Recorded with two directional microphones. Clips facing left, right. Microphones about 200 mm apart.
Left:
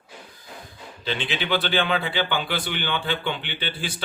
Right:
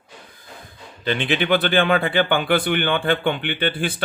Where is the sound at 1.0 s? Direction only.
55° right (ahead or behind).